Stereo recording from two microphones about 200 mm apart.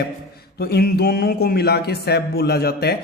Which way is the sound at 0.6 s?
50° left (ahead or behind).